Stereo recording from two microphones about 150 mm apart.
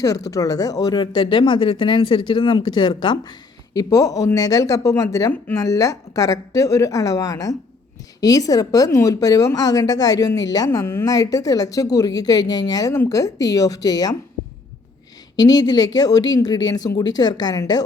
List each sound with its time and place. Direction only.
0.3 s a woman's voice: 25° left (ahead or behind)
15.4 s a woman's voice: 25° left (ahead or behind)